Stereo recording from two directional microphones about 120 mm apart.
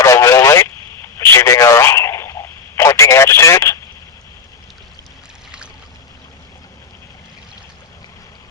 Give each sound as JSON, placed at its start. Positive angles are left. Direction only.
{"t": 0.0, "sound": "radio", "side_deg": 25}